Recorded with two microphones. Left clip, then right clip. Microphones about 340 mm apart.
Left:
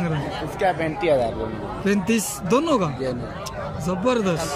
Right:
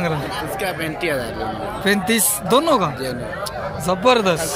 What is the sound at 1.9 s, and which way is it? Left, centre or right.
Speech, centre.